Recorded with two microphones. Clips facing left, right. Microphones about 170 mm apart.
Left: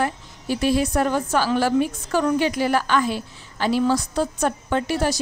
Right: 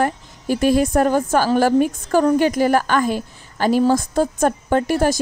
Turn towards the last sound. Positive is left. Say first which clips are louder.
# right 5 dB
turn(degrees=-50)  # may be behind; listen again after turning